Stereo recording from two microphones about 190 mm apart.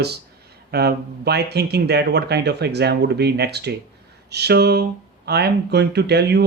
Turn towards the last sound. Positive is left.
turn(degrees=-60)  # may be behind; listen again after turning